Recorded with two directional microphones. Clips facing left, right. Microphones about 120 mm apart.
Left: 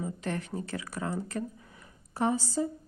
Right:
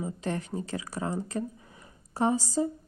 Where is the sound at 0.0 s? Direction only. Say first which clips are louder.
Right 2 dB; 30° right (ahead or behind).